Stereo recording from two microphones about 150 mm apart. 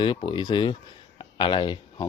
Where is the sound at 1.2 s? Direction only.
30° left (ahead or behind).